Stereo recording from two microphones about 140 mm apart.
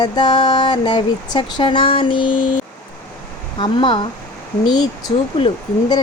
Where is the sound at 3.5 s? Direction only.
35° left (ahead or behind).